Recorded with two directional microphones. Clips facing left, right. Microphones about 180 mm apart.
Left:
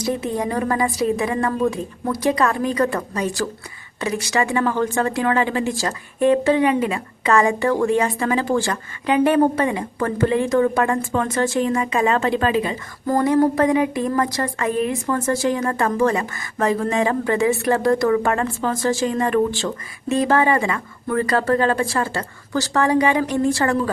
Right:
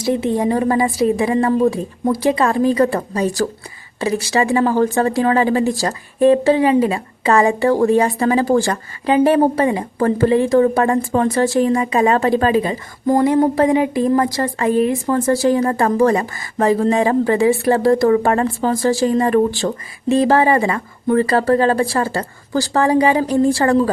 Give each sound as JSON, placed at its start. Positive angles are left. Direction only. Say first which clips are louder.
{"t": 0.0, "sound": "a woman's voice", "louder": "right 5 dB", "side_deg": -30}
{"t": 13.1, "sound": "a woman's voice", "louder": "right 3 dB", "side_deg": -25}